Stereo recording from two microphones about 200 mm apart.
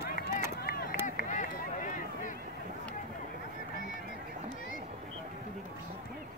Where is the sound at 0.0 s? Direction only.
50° left (ahead or behind).